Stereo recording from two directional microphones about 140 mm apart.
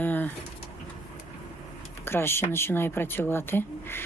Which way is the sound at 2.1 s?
15° left (ahead or behind).